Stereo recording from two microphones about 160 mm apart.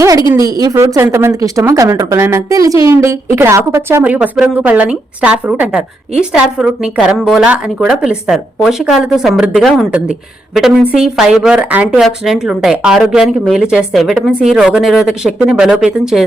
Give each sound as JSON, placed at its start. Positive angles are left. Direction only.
{"t": 0.0, "sound": "a woman's voice", "side_deg": -20}